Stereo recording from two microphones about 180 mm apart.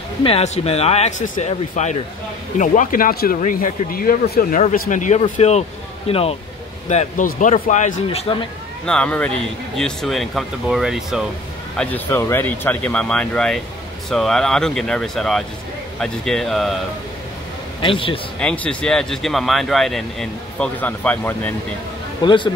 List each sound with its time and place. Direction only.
0.2 s speech: 35° left (ahead or behind)
6.9 s speech: 45° left (ahead or behind)
8.8 s speech: 5° left (ahead or behind)
17.8 s a man's voice: 30° left (ahead or behind)
18.4 s speech: 5° left (ahead or behind)
22.2 s a man's voice: 25° left (ahead or behind)